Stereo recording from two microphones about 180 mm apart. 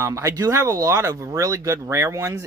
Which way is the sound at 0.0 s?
15° right (ahead or behind).